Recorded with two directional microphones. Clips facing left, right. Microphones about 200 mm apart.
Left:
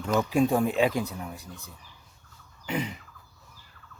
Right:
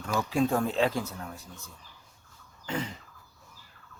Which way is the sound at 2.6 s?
15° left (ahead or behind).